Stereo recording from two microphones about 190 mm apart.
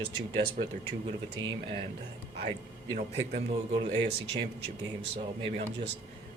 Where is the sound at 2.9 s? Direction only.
70° right (ahead or behind).